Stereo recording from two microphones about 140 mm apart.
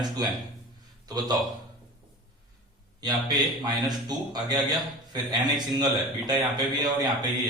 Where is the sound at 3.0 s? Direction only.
30° right (ahead or behind).